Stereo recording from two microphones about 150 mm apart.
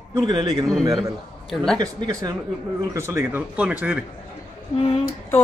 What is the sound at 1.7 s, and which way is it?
Speech, 30° right (ahead or behind).